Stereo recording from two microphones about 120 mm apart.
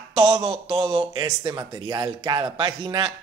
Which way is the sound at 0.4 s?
50° right (ahead or behind).